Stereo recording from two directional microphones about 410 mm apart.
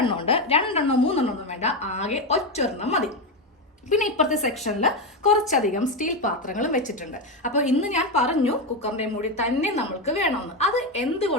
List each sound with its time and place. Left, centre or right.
0.0 s a woman's voice: centre